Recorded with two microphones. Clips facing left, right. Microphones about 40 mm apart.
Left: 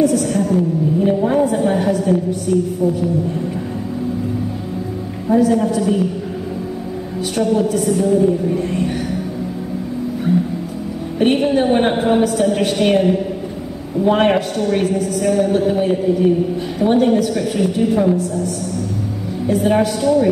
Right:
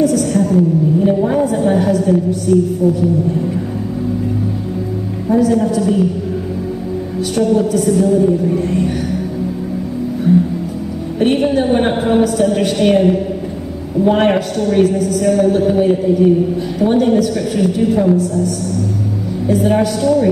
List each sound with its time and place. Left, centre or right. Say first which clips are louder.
0.0 s a sound: right 2 dB; centre
5.3 s a woman's voice: right 1 dB; centre
7.3 s a woman's voice: right 3 dB; centre
10.3 s a woman's voice: right 6 dB; centre